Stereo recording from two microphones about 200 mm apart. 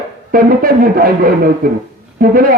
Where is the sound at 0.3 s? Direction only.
45° right (ahead or behind).